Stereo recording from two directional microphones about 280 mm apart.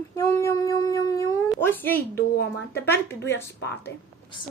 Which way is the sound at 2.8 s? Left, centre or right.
Centre.